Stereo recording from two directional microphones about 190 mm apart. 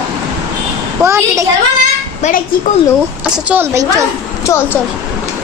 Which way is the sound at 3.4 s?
15° right (ahead or behind).